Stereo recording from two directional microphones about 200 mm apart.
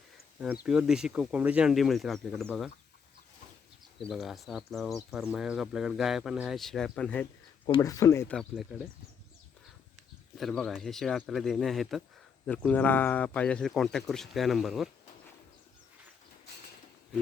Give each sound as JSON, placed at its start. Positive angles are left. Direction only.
{"t": 0.3, "sound": "speech", "side_deg": -5}
{"t": 4.0, "sound": "speech", "side_deg": 0}
{"t": 7.7, "sound": "speech", "side_deg": 15}
{"t": 10.3, "sound": "speech", "side_deg": 0}